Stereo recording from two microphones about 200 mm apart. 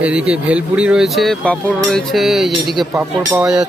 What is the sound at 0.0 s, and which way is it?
Speech, 5° right (ahead or behind).